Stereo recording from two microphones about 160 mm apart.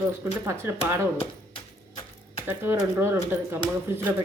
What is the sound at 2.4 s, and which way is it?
Speech, 15° right (ahead or behind).